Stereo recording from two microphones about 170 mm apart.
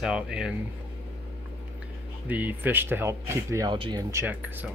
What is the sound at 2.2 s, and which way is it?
Speech, 10° right (ahead or behind).